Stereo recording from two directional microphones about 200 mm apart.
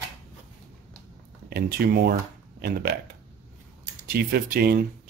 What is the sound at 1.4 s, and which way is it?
Speech, 50° right (ahead or behind).